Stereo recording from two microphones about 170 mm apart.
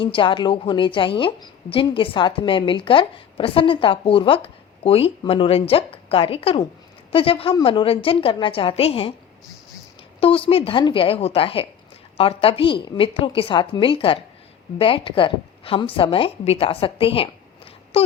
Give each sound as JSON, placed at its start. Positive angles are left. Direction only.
{"t": 0.0, "sound": "a woman's voice", "side_deg": 30}
{"t": 10.2, "sound": "a woman's voice", "side_deg": 30}